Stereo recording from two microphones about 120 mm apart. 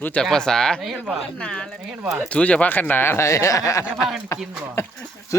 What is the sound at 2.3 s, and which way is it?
Speech, 10° left (ahead or behind).